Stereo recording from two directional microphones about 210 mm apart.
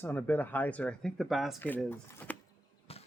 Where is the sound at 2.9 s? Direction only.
30° left (ahead or behind).